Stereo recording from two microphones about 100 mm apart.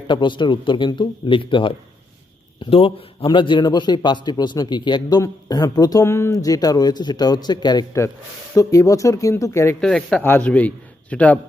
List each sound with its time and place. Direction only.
0.1 s a man's voice: 55° left (ahead or behind)
3.2 s a man's voice: 55° left (ahead or behind)
8.5 s speech: 35° left (ahead or behind)
9.8 s speech: 5° left (ahead or behind)